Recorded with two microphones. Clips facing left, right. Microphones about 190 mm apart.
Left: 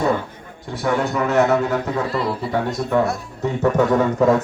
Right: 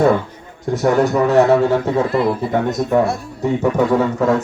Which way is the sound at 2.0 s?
50° right (ahead or behind).